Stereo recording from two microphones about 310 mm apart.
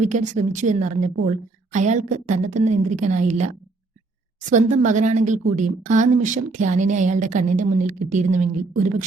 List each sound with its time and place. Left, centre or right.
0.0 s a woman's voice: right